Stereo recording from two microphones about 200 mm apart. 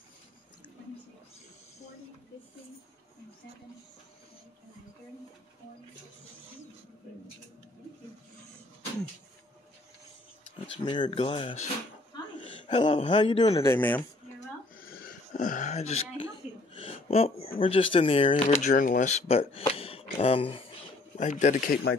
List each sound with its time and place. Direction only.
10.8 s speech: 25° left (ahead or behind)
14.8 s a sound: 45° left (ahead or behind); by 17.5 s 30° left (ahead or behind)
17.6 s speech: 25° left (ahead or behind)
18.5 s speech: 40° left (ahead or behind)